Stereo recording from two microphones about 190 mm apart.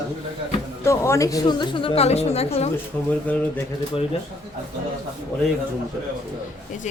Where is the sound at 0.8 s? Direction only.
15° left (ahead or behind); by 2.7 s 35° left (ahead or behind).